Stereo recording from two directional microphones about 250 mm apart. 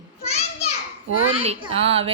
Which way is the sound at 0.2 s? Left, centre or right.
Left.